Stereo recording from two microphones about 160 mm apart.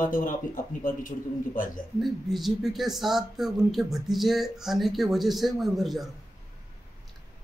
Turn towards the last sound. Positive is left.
turn(degrees=0)  # may be behind; listen again after turning